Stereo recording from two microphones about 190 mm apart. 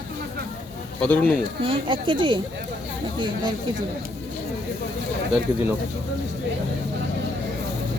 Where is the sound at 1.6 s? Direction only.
30° right (ahead or behind).